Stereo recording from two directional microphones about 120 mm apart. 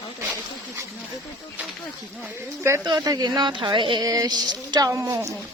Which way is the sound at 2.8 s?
35° right (ahead or behind).